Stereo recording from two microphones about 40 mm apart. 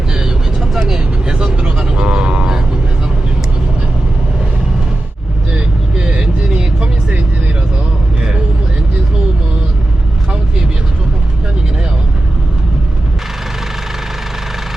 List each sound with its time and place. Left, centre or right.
0.7 s vehicle: centre
0.9 s vehicle: centre
5.5 s vehicle: right